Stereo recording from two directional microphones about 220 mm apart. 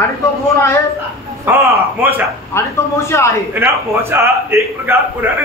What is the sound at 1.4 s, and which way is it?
Speech, 10° right (ahead or behind).